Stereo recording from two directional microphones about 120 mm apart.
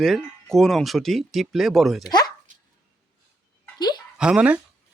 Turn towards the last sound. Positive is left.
turn(degrees=-10)  # may be behind; listen again after turning